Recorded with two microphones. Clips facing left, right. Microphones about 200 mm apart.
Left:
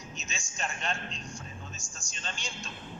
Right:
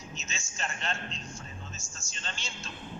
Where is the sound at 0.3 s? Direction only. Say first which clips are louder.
Left 1 dB; 15° left (ahead or behind).